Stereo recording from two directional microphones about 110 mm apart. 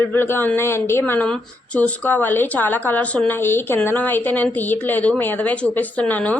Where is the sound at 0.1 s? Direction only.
20° left (ahead or behind).